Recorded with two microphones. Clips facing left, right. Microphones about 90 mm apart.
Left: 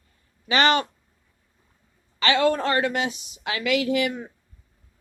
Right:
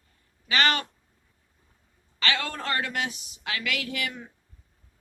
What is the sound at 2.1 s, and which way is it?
A woman's voice, 20° left (ahead or behind).